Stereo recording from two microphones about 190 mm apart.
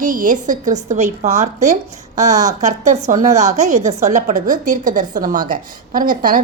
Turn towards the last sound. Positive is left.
turn(degrees=-45)  # may be behind; listen again after turning